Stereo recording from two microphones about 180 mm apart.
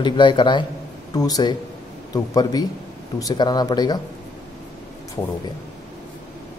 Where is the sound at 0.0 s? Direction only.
25° left (ahead or behind).